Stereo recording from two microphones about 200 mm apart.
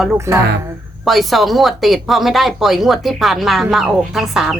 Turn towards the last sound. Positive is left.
turn(degrees=0)  # may be behind; listen again after turning